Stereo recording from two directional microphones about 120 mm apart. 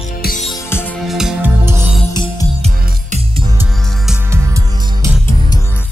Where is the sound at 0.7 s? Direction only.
20° left (ahead or behind).